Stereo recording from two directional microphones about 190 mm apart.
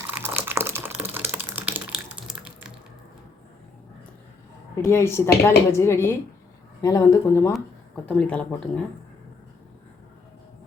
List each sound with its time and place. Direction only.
0.1 s typing: 10° right (ahead or behind)
4.8 s speech: 15° left (ahead or behind)
8.0 s speech: 5° left (ahead or behind)